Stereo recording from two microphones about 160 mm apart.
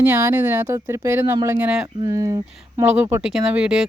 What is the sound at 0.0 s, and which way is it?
Speech, 15° right (ahead or behind).